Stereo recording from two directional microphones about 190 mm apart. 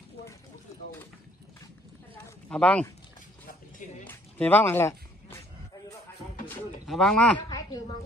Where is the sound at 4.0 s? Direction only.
10° left (ahead or behind).